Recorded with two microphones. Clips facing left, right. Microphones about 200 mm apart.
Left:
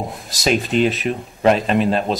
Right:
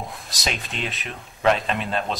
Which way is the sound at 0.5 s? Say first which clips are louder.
Left 13 dB; centre (ahead or behind).